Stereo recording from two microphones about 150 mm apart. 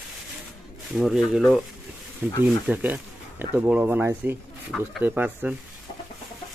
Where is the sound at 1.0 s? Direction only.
5° right (ahead or behind).